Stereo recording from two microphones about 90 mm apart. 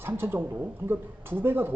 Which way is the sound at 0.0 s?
25° right (ahead or behind).